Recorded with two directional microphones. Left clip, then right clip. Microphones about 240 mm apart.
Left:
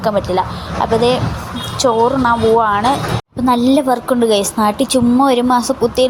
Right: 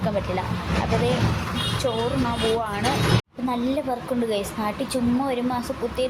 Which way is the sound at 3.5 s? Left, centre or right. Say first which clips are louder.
Left 13 dB; left.